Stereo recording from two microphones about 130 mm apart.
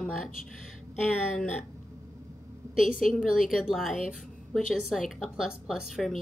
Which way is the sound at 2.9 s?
90° left.